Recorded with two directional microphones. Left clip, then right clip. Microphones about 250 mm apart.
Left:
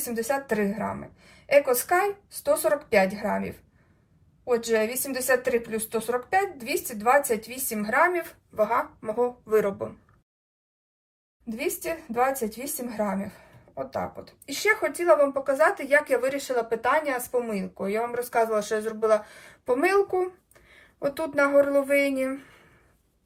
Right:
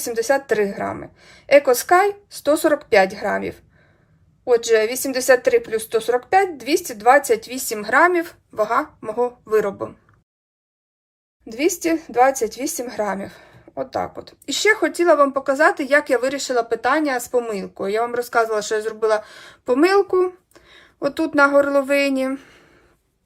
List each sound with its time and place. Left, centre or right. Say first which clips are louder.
0.1 s speech: right 8 dB; centre
12.1 s speech: right 8 dB; centre